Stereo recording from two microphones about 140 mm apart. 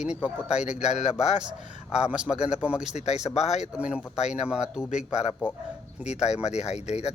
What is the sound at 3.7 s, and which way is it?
A man's voice, 10° right (ahead or behind).